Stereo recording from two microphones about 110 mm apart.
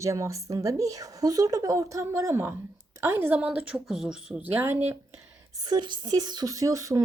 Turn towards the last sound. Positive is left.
turn(degrees=-30)  # may be behind; listen again after turning